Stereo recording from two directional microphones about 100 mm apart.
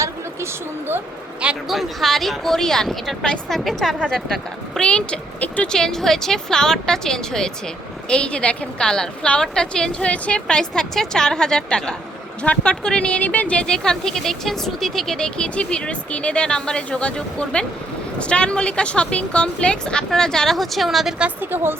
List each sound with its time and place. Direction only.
1.4 s speech: 5° right (ahead or behind)
21.2 s speech: 20° right (ahead or behind)